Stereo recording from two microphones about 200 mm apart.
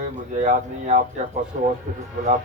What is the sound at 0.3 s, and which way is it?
Speech, 40° right (ahead or behind).